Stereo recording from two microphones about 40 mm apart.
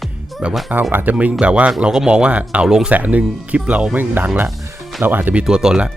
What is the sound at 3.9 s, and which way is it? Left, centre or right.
Speech, right.